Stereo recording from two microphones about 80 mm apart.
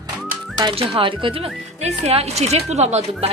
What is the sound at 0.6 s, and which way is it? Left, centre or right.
Speech, right.